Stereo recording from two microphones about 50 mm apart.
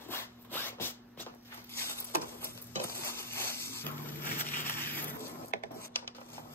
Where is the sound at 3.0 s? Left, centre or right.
Left.